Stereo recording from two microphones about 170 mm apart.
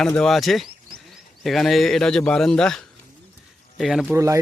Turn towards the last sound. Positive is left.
turn(degrees=-15)  # may be behind; listen again after turning